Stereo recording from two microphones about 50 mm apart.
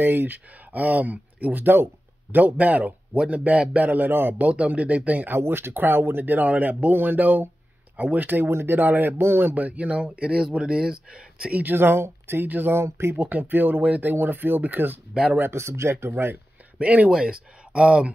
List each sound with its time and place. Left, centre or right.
0.0 s speech: right
4.4 s speech: right
5.3 s speech: right
8.5 s speech: right
8.7 s speech: right
9.6 s speech: right
10.3 s speech: centre
11.6 s speech: right
12.4 s speech: right
12.7 s speech: right
13.2 s speech: right
15.5 s speech: right
16.7 s speech: right